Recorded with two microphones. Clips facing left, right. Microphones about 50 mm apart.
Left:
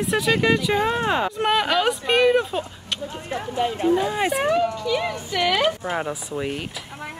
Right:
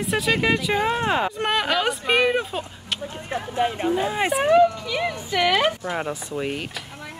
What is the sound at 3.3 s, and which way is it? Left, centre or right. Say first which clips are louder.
Speech: right 1 dB; right.